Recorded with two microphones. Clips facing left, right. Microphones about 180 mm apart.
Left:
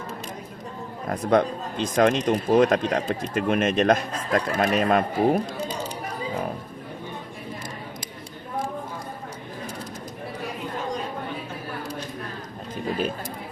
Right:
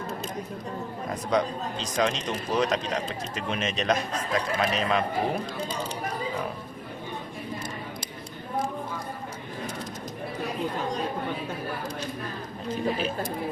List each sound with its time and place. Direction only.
1.1 s speech: 55° left (ahead or behind)